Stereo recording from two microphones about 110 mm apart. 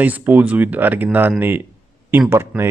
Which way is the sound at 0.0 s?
15° right (ahead or behind).